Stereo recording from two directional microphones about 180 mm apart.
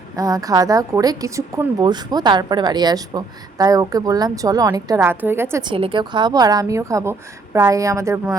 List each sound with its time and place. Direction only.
0.2 s a woman's voice: 20° right (ahead or behind)
5.6 s a woman's voice: 30° right (ahead or behind)